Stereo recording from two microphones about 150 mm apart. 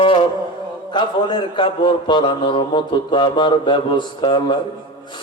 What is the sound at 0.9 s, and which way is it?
A man's voice, 30° left (ahead or behind).